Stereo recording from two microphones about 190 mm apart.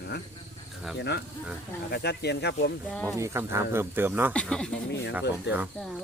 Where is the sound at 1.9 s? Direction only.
60° left (ahead or behind).